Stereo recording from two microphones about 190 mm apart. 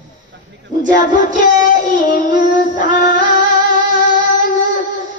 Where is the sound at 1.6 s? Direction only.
45° left (ahead or behind).